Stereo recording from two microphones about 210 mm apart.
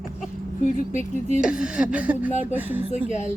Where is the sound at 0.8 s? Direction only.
35° left (ahead or behind).